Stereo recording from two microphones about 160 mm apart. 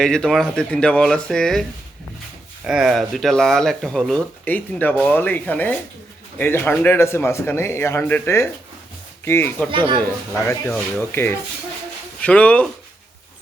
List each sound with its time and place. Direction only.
0.0 s speech: 5° left (ahead or behind)
2.6 s speech: centre (ahead or behind); by 9.6 s 15° left (ahead or behind)
9.7 s speech: 30° right (ahead or behind)
11.0 s speech: 15° left (ahead or behind)